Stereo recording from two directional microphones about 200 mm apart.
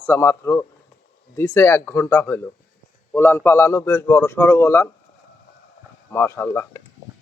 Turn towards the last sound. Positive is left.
turn(degrees=15)  # may be behind; listen again after turning